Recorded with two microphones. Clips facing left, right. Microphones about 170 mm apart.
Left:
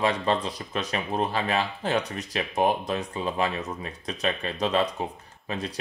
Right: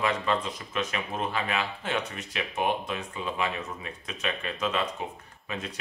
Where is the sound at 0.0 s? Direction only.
35° left (ahead or behind).